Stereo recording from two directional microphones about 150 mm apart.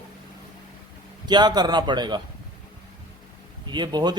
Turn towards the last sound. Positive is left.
turn(degrees=-30)  # may be behind; listen again after turning